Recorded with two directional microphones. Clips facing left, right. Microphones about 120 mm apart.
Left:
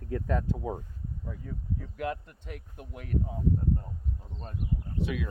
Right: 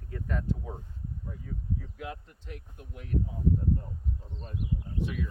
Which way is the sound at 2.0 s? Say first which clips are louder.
Left 7 dB; 80° left.